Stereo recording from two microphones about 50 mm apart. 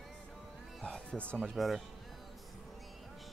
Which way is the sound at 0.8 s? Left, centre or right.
Left.